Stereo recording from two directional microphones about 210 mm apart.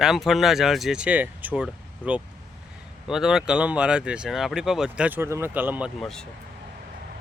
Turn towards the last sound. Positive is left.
turn(degrees=0)  # may be behind; listen again after turning